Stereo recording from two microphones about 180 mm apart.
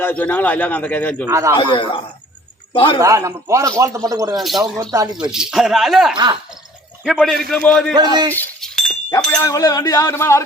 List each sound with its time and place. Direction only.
0.0 s speech: 10° left (ahead or behind)
1.3 s a man's voice: 15° right (ahead or behind)
1.5 s a man's voice: 25° left (ahead or behind)
3.0 s a man's voice: 15° right (ahead or behind)
4.4 s speech: centre (ahead or behind)
4.6 s speech: 20° right (ahead or behind)
5.3 s speech: 5° right (ahead or behind)
8.3 s chink: 5° left (ahead or behind)
9.0 s speech: 15° left (ahead or behind)